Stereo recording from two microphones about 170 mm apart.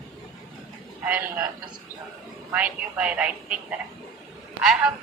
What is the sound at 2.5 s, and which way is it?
A woman's voice, 10° right (ahead or behind).